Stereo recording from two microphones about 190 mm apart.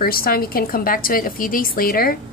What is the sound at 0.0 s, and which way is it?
Speech, 50° left (ahead or behind).